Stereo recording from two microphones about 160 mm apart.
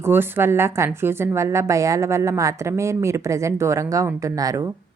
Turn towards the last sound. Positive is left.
turn(degrees=-20)  # may be behind; listen again after turning